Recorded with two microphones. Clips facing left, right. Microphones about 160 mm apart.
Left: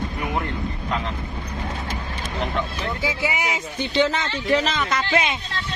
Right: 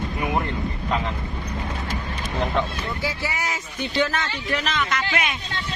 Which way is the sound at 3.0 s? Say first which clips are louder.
Left 4 dB; 20° left (ahead or behind).